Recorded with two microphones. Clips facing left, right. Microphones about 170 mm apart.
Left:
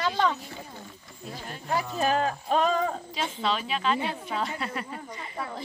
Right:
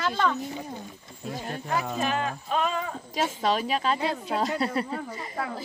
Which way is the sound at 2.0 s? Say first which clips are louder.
Left 3 dB; 40° left (ahead or behind).